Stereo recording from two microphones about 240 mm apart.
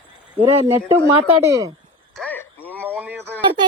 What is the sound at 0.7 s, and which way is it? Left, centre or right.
Speech, centre.